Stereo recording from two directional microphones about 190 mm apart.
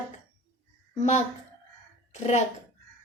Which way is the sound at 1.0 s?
35° left (ahead or behind).